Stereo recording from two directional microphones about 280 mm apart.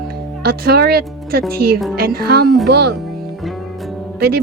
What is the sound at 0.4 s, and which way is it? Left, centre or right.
Speech, right.